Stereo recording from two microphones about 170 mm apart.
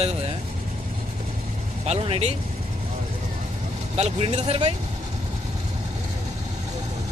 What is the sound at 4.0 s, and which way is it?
Speech, 35° right (ahead or behind).